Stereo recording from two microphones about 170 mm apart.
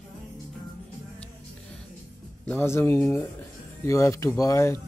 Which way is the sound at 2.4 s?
10° left (ahead or behind).